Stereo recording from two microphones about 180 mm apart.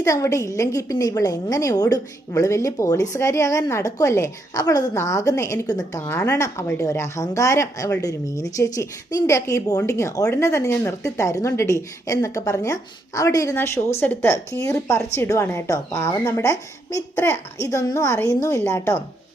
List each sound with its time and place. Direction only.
0.0 s a woman's voice: 15° left (ahead or behind)